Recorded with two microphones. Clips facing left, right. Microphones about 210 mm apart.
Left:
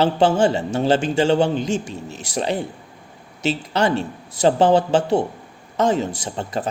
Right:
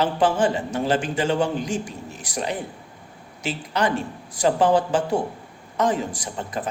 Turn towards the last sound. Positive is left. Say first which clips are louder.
# left 4 dB
turn(degrees=30)  # may be behind; listen again after turning